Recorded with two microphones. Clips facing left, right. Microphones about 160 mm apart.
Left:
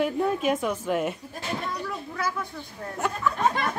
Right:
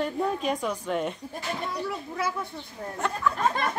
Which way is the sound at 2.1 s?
25° right (ahead or behind).